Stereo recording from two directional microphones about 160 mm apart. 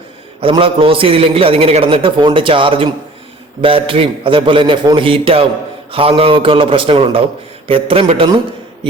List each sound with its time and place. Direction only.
0.3 s a man's voice: 35° right (ahead or behind)